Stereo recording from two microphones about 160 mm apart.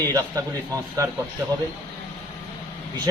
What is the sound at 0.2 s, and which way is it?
Speech, 20° right (ahead or behind).